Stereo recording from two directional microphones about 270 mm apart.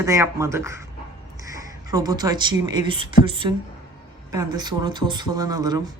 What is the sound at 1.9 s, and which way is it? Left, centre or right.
Speech, centre.